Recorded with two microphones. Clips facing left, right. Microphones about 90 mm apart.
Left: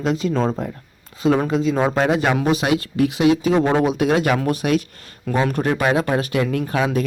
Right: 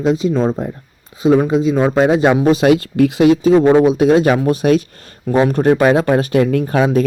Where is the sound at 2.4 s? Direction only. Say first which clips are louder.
Right 7 dB; 35° right (ahead or behind).